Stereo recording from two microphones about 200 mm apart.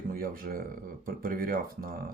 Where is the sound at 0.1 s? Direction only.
45° right (ahead or behind).